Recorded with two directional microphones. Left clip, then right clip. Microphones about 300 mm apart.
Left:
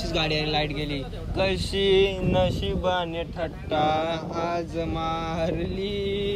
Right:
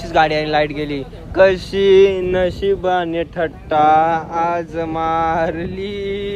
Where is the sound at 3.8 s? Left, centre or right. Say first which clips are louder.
Right 14 dB; centre.